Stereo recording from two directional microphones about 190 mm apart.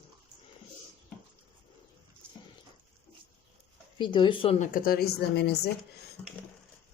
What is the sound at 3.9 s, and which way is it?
Speech, 25° left (ahead or behind).